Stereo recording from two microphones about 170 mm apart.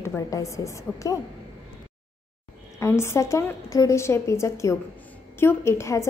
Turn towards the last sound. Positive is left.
turn(degrees=15)  # may be behind; listen again after turning